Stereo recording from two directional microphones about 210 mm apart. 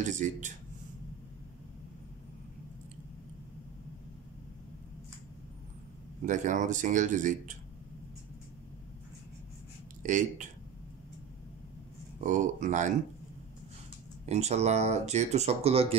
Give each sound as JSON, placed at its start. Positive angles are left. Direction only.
{"t": 0.1, "sound": "speech", "side_deg": -35}
{"t": 6.2, "sound": "speech", "side_deg": -35}
{"t": 10.0, "sound": "speech", "side_deg": -35}
{"t": 12.2, "sound": "speech", "side_deg": -35}
{"t": 14.2, "sound": "speech", "side_deg": -30}